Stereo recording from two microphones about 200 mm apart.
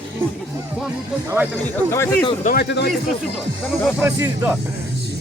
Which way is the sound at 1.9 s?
10° left (ahead or behind).